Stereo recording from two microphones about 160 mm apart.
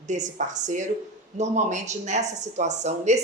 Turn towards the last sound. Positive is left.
turn(degrees=-45)  # may be behind; listen again after turning